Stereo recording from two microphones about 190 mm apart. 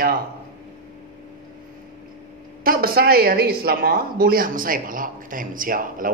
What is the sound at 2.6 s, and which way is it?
A man's voice, 50° right (ahead or behind).